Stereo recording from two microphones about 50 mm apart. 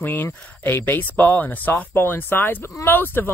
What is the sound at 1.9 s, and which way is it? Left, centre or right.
Speech, left.